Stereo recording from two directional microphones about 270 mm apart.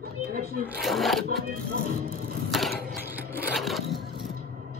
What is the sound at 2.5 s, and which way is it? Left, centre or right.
Speech, centre.